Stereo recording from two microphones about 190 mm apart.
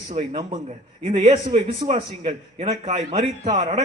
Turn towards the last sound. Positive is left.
turn(degrees=-35)  # may be behind; listen again after turning